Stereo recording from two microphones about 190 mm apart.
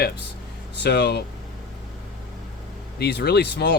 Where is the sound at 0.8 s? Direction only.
60° left (ahead or behind).